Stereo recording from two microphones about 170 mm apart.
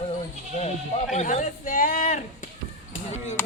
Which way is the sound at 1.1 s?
45° left (ahead or behind).